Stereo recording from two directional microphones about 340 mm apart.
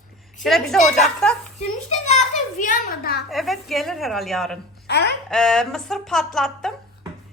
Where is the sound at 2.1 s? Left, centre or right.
Left.